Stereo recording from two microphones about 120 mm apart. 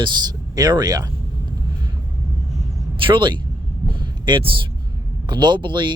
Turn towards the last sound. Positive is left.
turn(degrees=-40)  # may be behind; listen again after turning